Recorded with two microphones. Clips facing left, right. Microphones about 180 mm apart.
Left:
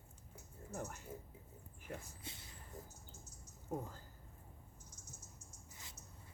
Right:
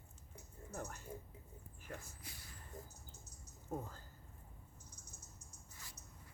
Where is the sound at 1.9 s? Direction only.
25° left (ahead or behind).